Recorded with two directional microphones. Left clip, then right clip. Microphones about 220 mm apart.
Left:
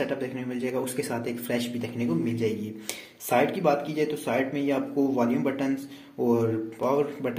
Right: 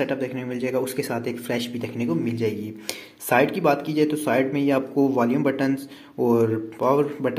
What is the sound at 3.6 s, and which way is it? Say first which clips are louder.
Speech: right 4 dB; 35° right (ahead or behind).